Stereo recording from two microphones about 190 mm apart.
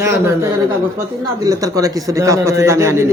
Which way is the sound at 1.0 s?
15° right (ahead or behind).